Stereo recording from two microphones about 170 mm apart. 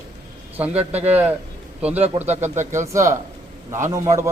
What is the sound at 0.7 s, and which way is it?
Speech, 40° right (ahead or behind).